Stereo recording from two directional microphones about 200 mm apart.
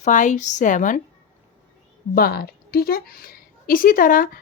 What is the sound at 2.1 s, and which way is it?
A woman's voice, 50° left (ahead or behind).